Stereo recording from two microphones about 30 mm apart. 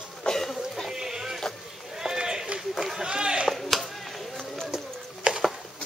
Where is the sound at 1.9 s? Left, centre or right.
Right.